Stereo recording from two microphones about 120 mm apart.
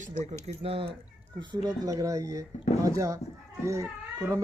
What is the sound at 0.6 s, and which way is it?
Speech, 55° right (ahead or behind).